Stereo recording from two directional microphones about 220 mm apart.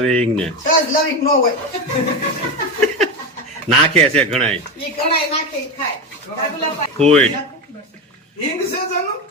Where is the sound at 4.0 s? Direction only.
5° left (ahead or behind).